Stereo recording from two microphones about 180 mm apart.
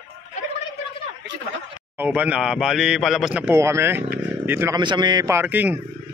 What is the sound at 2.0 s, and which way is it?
A man's voice, 10° right (ahead or behind).